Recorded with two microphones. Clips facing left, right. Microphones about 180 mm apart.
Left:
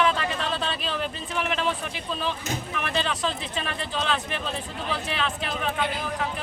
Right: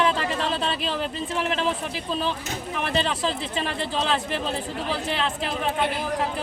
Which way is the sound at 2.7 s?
30° right (ahead or behind).